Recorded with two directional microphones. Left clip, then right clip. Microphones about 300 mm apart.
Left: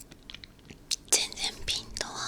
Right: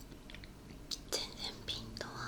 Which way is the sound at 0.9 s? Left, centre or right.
Left.